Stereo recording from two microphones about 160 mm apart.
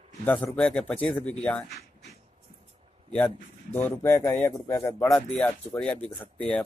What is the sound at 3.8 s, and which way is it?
Speech, 15° left (ahead or behind).